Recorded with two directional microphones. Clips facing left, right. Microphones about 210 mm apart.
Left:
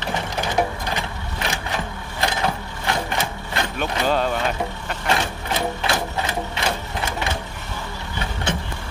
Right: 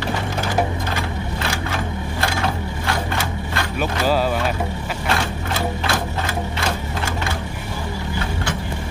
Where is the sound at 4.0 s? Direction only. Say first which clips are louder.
Right 2 dB; 5° right (ahead or behind).